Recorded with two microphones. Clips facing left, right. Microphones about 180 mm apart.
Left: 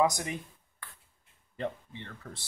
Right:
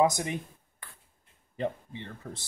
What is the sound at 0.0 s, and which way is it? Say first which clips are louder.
Speech: right 2 dB; 25° right (ahead or behind).